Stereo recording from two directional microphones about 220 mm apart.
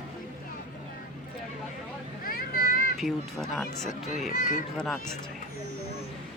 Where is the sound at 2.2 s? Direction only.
40° left (ahead or behind).